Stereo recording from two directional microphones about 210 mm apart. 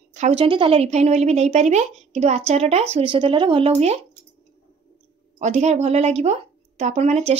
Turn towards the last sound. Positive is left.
turn(degrees=-30)  # may be behind; listen again after turning